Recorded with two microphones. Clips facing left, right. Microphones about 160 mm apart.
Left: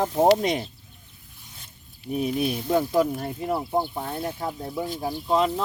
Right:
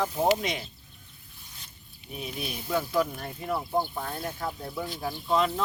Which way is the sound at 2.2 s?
30° left (ahead or behind).